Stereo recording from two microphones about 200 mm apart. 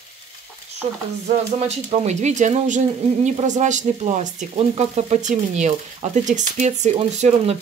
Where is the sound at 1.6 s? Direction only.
30° right (ahead or behind).